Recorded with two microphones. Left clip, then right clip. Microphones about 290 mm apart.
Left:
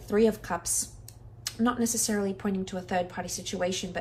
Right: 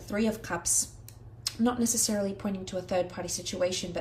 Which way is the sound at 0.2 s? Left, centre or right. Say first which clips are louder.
Left 6 dB; right.